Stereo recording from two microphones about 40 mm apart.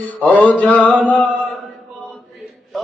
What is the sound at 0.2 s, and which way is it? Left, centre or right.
Mantra, left.